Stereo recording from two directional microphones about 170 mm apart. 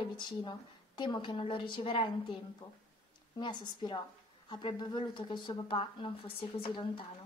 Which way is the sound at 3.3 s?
25° left (ahead or behind).